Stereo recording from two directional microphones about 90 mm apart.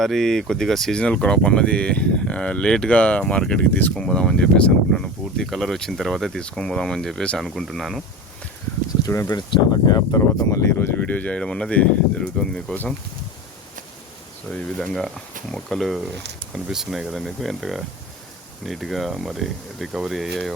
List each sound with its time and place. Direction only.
0.0 s speech: 5° left (ahead or behind)
9.0 s speech: 45° left (ahead or behind)
10.2 s speech: 35° left (ahead or behind)
11.0 s speech: 15° left (ahead or behind)
14.5 s speech: 10° left (ahead or behind)